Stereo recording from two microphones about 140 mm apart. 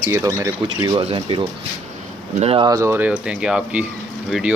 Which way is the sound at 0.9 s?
40° right (ahead or behind).